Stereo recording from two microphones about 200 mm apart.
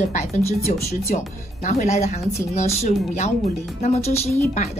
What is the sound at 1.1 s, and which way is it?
Speech, 35° left (ahead or behind).